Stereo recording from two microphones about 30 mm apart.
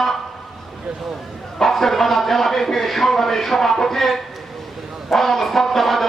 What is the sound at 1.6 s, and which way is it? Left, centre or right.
Speech, centre.